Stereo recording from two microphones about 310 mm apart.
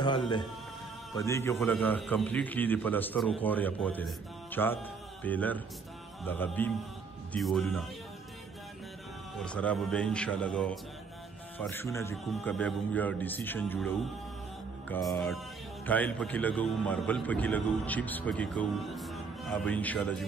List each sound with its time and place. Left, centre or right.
0.0 s speech: centre
9.4 s speech: centre